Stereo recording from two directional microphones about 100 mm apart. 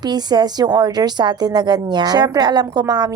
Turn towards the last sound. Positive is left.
turn(degrees=-40)  # may be behind; listen again after turning